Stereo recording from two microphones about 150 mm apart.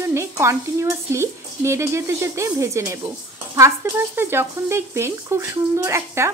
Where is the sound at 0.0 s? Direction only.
15° right (ahead or behind).